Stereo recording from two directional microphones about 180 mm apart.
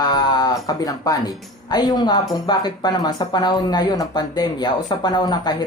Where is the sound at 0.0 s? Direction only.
20° left (ahead or behind).